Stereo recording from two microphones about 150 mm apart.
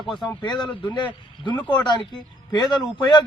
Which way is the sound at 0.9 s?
30° left (ahead or behind).